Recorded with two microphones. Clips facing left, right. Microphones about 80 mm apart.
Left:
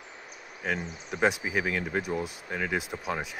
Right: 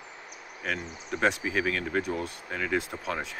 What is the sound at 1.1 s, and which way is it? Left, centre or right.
Speech, centre.